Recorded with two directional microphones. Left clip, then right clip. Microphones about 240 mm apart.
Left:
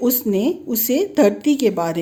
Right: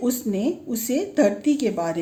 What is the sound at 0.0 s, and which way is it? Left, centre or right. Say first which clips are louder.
A woman's voice: left 5 dB; left.